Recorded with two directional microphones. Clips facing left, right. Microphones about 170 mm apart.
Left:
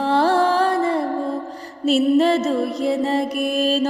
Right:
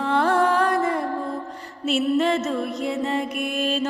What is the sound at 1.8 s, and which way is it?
Music, 40° left (ahead or behind).